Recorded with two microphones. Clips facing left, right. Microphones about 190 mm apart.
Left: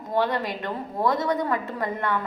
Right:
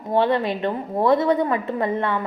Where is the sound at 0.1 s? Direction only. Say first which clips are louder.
Right 5 dB; 25° right (ahead or behind).